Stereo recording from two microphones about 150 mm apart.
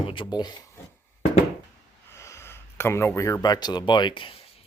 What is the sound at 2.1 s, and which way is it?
Speech, 20° left (ahead or behind).